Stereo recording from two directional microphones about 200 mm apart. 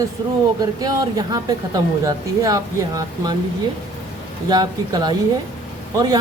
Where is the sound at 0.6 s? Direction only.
20° right (ahead or behind).